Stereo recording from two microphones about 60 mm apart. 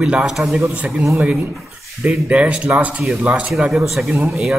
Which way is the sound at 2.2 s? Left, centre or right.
Centre.